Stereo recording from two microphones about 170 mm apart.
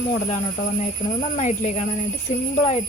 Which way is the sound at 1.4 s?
45° left (ahead or behind).